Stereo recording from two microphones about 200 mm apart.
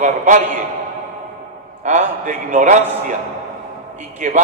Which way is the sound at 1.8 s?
35° right (ahead or behind).